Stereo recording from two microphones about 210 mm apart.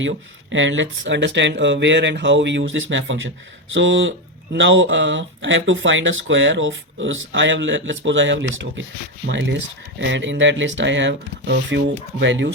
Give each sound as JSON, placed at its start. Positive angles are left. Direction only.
{"t": 0.0, "sound": "speech", "side_deg": -65}